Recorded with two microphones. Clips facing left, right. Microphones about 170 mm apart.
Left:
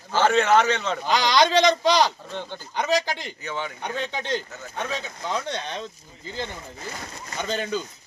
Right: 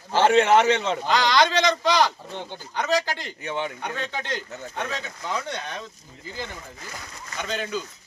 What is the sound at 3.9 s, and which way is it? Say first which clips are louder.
Speech: left 3 dB; 15° left (ahead or behind).